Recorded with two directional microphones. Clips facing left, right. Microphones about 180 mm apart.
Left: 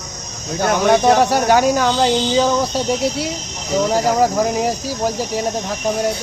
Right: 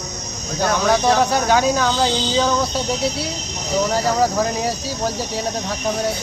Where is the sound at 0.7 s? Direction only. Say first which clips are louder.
Left 4 dB; 20° left (ahead or behind).